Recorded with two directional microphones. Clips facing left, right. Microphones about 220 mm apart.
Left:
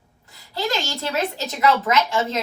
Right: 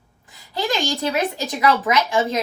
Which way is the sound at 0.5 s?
15° right (ahead or behind).